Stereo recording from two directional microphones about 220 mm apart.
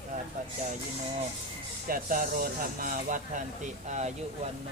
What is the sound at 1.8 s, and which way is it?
Speech, 40° right (ahead or behind).